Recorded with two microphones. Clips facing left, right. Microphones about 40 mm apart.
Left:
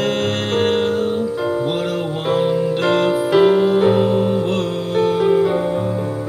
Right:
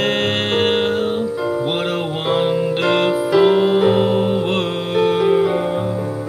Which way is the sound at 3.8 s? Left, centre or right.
Centre.